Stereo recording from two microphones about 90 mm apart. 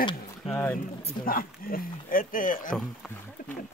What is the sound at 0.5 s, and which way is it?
Speech, 25° left (ahead or behind).